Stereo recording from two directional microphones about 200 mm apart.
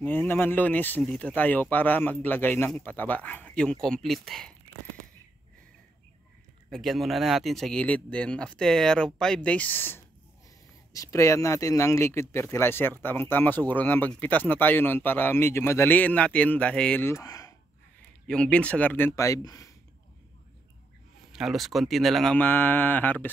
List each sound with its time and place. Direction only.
0.0 s speech: 10° left (ahead or behind)
6.7 s speech: centre (ahead or behind); by 17.6 s 15° left (ahead or behind)
18.2 s speech: 5° left (ahead or behind)
21.3 s speech: centre (ahead or behind)